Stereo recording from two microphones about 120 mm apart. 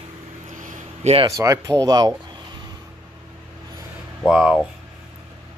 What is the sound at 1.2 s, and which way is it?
Speech, 25° right (ahead or behind).